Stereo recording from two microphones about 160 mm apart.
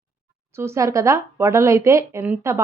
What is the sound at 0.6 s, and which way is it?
Speech, 15° right (ahead or behind).